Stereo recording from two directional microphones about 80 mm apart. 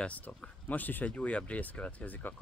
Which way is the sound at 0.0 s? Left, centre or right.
Centre.